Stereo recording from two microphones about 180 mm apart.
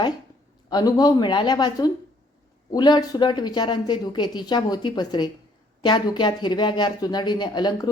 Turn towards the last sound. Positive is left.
turn(degrees=20)  # may be behind; listen again after turning